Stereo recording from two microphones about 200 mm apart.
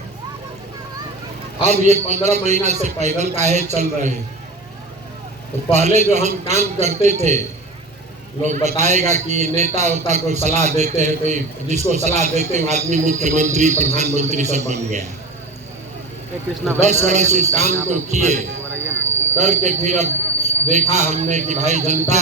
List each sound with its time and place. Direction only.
1.6 s a man's voice: 35° right (ahead or behind)
5.7 s a man's voice: 35° right (ahead or behind)
8.4 s a man's voice: 35° right (ahead or behind)
16.8 s a man's voice: 35° right (ahead or behind)